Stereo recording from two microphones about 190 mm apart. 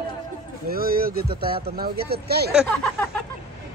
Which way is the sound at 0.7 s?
50° right (ahead or behind).